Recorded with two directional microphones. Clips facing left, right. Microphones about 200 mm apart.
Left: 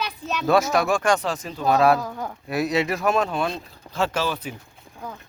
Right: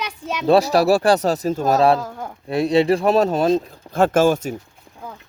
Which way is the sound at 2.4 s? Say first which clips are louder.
Right 7 dB; 30° right (ahead or behind).